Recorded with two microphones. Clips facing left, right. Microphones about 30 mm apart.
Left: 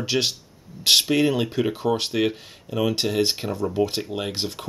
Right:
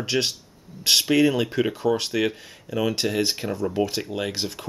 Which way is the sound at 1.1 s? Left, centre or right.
Left.